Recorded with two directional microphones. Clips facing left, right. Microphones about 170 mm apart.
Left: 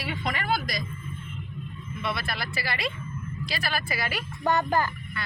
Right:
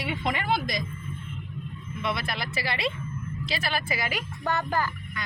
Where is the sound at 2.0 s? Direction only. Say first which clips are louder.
Right 1 dB; 20° right (ahead or behind).